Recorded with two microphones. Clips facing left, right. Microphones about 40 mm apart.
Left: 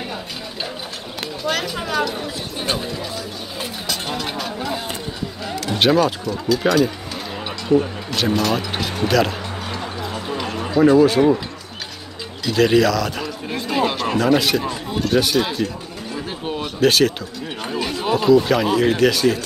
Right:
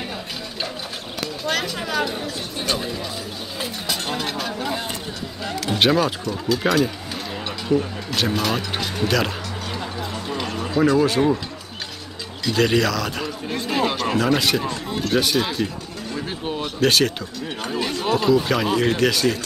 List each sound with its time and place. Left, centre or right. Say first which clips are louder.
1.4 s a sound: left 2 dB; centre
2.2 s speech: left 1 dB; left
2.8 s speech: left 1 dB; centre
3.8 s a sound: even; centre
5.4 s vehicle: right 1 dB; centre
5.7 s speech: left 2 dB; centre
8.1 s speech: left 2 dB; centre
9.9 s music: left 2 dB; centre
10.3 s a sound: left 3 dB; centre
11.0 s speech: left 4 dB; centre
12.4 s a man's voice: left 4 dB; centre
16.1 s a sound: left 1 dB; centre
17.6 s speech: left 1 dB; centre